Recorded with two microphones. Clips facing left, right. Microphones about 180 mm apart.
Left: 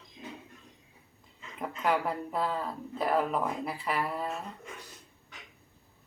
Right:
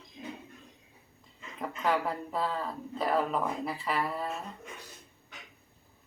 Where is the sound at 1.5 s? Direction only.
5° left (ahead or behind).